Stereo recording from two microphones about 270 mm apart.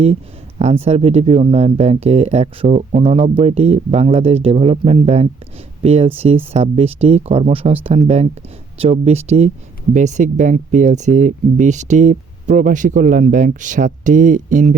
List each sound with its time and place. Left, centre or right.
0.6 s speech: right